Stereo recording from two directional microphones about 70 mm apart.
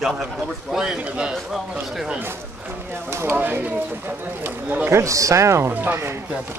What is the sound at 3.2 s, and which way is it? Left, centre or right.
Speech, right.